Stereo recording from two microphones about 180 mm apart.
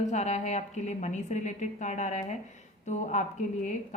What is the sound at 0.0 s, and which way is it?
A woman's voice, 40° left (ahead or behind).